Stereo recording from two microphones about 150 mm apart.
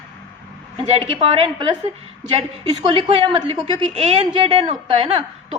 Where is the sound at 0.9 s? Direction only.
40° right (ahead or behind).